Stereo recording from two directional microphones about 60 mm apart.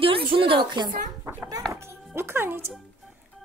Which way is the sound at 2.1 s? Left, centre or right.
Right.